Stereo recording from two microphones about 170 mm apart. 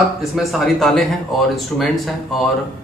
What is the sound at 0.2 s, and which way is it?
Speech, centre (ahead or behind).